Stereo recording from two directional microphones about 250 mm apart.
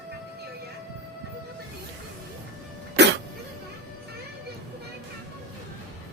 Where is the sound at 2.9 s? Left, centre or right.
Right.